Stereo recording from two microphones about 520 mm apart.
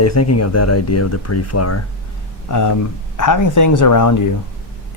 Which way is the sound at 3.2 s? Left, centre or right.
Left.